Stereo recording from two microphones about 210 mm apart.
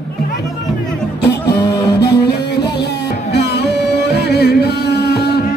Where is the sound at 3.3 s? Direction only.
55° left (ahead or behind).